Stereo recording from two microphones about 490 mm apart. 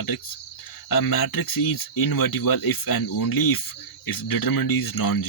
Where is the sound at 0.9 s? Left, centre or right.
Left.